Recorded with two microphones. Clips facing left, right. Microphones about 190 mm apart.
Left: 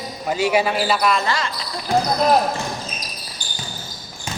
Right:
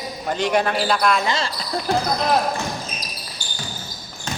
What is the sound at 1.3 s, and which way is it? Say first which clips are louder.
Speech: even; 25° right (ahead or behind).